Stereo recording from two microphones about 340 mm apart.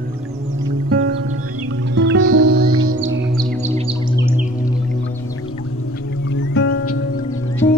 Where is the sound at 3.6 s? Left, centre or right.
Centre.